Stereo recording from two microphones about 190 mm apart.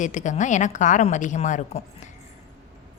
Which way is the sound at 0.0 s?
40° left (ahead or behind).